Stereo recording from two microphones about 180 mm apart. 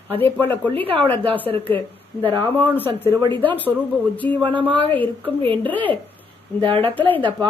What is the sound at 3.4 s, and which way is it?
Speech, 10° left (ahead or behind).